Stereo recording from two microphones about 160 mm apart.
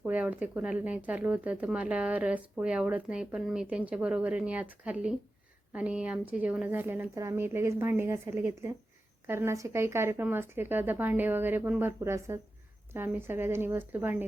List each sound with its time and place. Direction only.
0.0 s speech: 10° right (ahead or behind)